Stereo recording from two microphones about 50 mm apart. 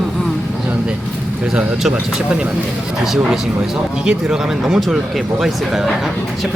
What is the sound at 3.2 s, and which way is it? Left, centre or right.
Speech, centre.